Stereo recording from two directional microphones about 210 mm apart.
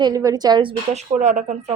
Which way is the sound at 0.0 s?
15° right (ahead or behind).